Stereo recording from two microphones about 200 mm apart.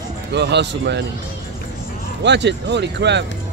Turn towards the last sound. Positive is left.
turn(degrees=-60)  # may be behind; listen again after turning